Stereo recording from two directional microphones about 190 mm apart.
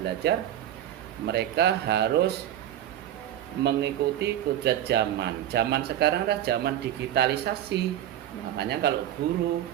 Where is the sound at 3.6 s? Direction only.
60° right (ahead or behind).